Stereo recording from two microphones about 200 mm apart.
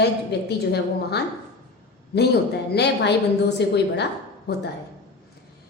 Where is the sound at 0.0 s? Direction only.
55° left (ahead or behind).